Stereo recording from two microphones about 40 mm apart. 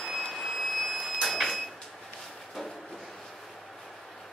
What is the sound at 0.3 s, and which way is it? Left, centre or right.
Vehicle, centre.